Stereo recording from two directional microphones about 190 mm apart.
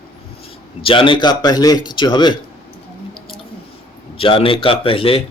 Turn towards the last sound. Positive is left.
turn(degrees=30)  # may be behind; listen again after turning